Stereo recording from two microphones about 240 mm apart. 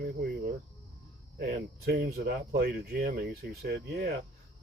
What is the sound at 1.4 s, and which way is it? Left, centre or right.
Speech, right.